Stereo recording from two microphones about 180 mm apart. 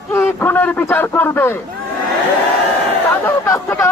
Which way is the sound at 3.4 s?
15° left (ahead or behind).